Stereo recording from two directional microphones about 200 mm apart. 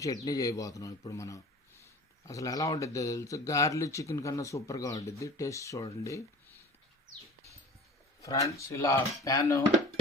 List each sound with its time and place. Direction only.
0.0 s speech: 15° left (ahead or behind)
8.2 s speech: 15° left (ahead or behind)